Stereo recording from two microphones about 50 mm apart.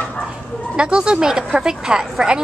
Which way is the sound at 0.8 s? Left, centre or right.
Centre.